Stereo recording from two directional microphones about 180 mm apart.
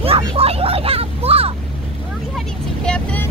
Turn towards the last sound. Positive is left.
turn(degrees=5)  # may be behind; listen again after turning